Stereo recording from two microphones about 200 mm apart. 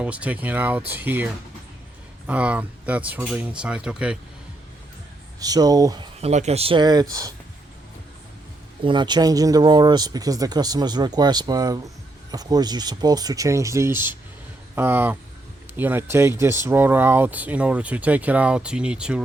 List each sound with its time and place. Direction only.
0.0 s speech: 5° right (ahead or behind)
5.4 s speech: 20° right (ahead or behind)
6.1 s speech: 35° right (ahead or behind)
8.8 s speech: 25° right (ahead or behind); by 19.2 s 5° right (ahead or behind)